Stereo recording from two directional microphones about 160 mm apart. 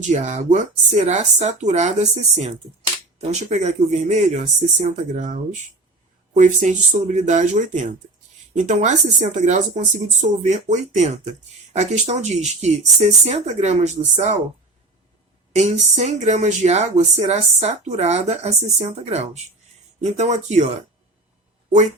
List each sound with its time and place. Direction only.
0.0 s speech: 50° right (ahead or behind)
15.5 s speech: 45° right (ahead or behind)